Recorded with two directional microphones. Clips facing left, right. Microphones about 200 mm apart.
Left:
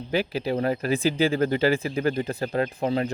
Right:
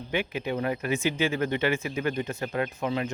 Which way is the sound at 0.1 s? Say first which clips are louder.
Left 4 dB; 35° left (ahead or behind).